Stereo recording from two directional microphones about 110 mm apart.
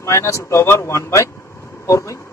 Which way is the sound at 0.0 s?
25° left (ahead or behind).